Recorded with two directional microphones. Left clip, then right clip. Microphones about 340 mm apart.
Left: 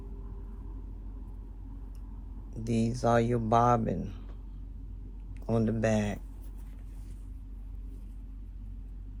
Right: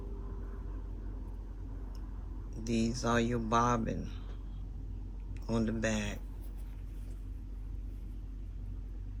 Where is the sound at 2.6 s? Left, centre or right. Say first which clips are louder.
Left 5 dB; centre.